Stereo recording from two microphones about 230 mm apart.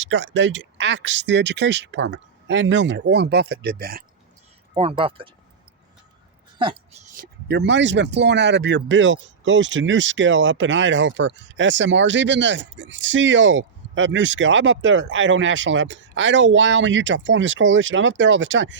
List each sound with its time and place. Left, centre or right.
0.0 s speech: right
4.7 s speech: right
7.2 s speech: right